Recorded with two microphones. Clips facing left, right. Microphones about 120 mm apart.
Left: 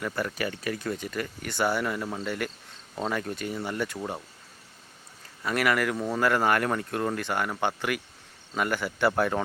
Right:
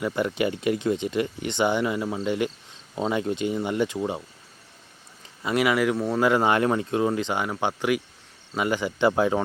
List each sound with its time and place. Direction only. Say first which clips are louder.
0.0 s speech: right 6 dB; 20° right (ahead or behind)
5.4 s speech: right 3 dB; 15° right (ahead or behind)